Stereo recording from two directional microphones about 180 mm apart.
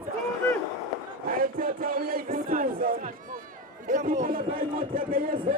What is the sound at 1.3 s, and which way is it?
A man's voice, 50° right (ahead or behind).